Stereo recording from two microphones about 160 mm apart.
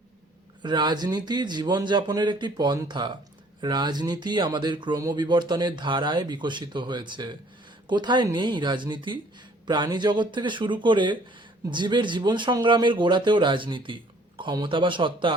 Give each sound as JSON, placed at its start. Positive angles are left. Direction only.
{"t": 0.6, "sound": "speech", "side_deg": -30}